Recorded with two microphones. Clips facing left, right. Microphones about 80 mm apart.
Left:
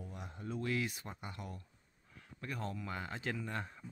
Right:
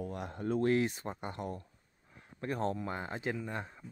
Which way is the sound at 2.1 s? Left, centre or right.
Right.